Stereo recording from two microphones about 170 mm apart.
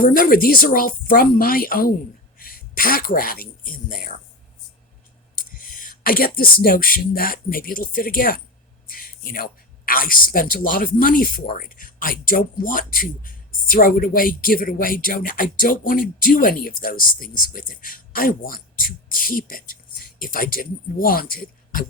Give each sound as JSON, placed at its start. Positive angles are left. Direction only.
{"t": 0.0, "sound": "speech", "side_deg": 60}
{"t": 5.7, "sound": "speech", "side_deg": 55}